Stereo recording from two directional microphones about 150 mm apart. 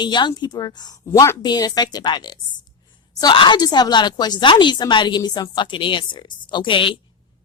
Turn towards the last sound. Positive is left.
turn(degrees=35)  # may be behind; listen again after turning